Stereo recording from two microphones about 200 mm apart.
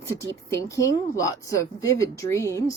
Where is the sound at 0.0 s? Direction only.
15° left (ahead or behind).